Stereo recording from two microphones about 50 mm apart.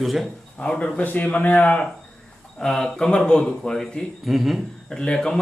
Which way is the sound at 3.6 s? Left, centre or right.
Centre.